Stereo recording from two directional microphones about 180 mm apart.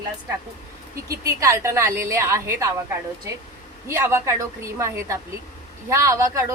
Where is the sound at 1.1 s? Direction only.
15° right (ahead or behind).